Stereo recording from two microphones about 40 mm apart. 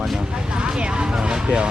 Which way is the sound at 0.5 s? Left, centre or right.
Right.